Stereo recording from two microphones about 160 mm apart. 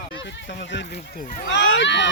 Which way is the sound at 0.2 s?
90° left.